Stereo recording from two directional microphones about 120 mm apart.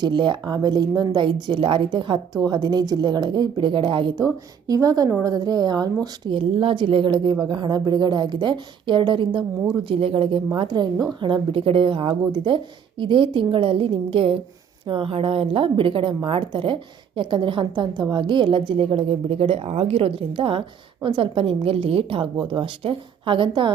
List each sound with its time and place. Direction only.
0.0 s speech: 40° right (ahead or behind)
6.3 s a woman's voice: 50° right (ahead or behind)